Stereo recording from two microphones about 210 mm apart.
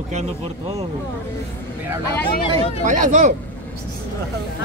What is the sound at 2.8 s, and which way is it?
Speech, 35° right (ahead or behind).